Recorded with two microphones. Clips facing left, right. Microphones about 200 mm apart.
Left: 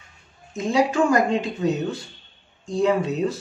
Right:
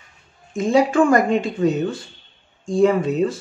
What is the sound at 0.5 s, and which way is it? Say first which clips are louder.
Speech: right 4 dB; 50° right (ahead or behind).